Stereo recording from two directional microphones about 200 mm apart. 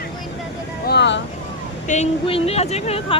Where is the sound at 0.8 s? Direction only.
60° left (ahead or behind).